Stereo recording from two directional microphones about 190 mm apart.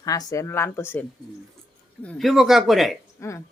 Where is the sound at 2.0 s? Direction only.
5° left (ahead or behind).